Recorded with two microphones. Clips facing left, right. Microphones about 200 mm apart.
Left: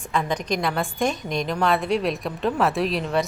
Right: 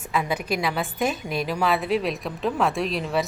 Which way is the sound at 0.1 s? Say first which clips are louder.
Left 1 dB; 5° right (ahead or behind).